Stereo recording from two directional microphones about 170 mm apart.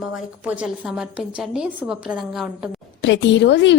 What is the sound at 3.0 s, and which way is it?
Speech, 90° left.